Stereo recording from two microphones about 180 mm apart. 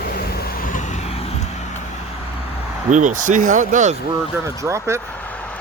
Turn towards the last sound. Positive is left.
turn(degrees=5)  # may be behind; listen again after turning